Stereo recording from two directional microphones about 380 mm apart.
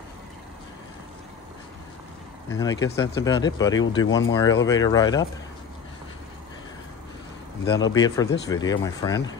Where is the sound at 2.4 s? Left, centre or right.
Centre.